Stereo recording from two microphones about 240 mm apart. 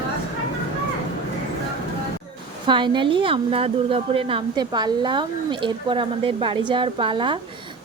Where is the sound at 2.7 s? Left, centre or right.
Centre.